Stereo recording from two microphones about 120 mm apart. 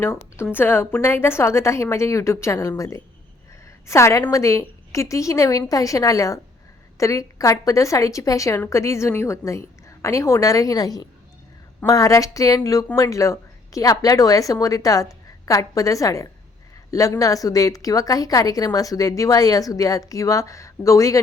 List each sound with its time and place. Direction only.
0.0 s a woman's voice: 20° left (ahead or behind)